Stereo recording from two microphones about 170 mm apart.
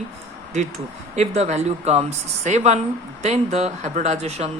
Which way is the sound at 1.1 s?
40° right (ahead or behind).